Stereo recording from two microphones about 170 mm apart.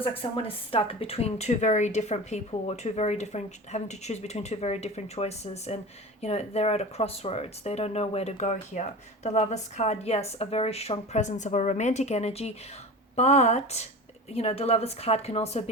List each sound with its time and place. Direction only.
0.2 s speech: 30° left (ahead or behind)